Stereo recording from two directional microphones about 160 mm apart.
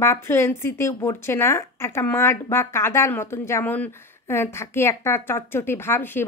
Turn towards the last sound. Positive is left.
turn(degrees=15)  # may be behind; listen again after turning